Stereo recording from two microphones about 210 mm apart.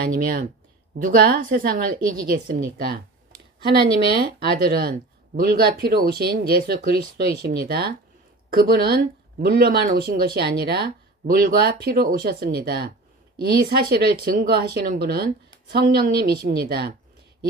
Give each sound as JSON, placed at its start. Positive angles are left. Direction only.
{"t": 0.0, "sound": "speech", "side_deg": -45}
{"t": 3.6, "sound": "speech", "side_deg": -20}
{"t": 4.5, "sound": "speech", "side_deg": -45}